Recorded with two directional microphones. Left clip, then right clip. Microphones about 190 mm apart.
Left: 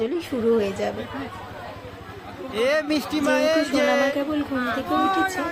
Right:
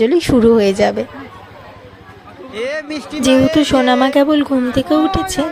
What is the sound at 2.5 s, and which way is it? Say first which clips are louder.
Speech: even; 10° left (ahead or behind).